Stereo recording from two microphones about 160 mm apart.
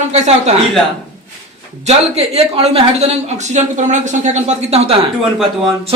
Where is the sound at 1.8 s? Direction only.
40° right (ahead or behind).